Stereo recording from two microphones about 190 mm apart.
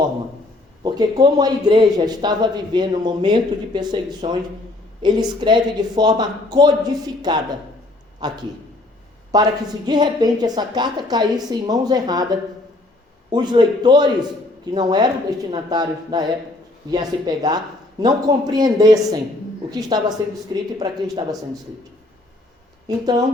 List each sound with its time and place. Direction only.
0.9 s speech: 20° right (ahead or behind)
23.0 s speech: 20° right (ahead or behind)